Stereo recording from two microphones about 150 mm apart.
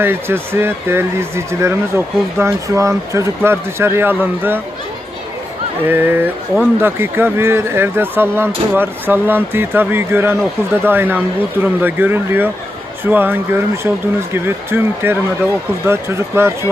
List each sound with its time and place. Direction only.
0.0 s speech: 15° right (ahead or behind)
5.9 s speech: 15° right (ahead or behind)